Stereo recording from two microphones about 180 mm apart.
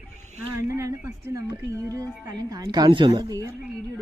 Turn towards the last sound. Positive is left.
turn(degrees=-20)  # may be behind; listen again after turning